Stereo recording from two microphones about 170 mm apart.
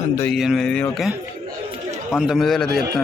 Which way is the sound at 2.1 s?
Centre (ahead or behind).